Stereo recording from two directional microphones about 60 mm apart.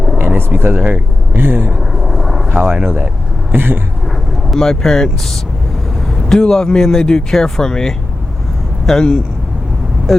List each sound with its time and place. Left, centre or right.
0.2 s speech: right
1.9 s vehicle: centre
2.8 s speech: right
4.4 s speech: centre